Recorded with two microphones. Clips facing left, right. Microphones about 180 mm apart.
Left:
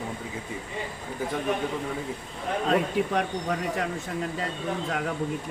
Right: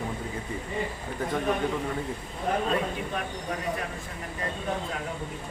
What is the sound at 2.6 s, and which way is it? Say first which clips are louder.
Speech: left 4 dB; 80° left.